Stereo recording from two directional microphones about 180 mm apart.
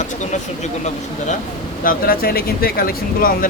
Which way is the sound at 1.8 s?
55° left (ahead or behind).